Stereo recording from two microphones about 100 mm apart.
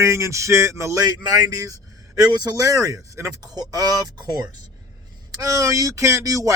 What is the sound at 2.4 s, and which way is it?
Speech, 35° right (ahead or behind).